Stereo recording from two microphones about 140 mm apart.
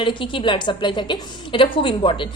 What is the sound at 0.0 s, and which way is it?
A woman's voice, 35° left (ahead or behind).